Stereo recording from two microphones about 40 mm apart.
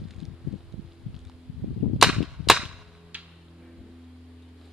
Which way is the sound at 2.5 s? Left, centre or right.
Centre.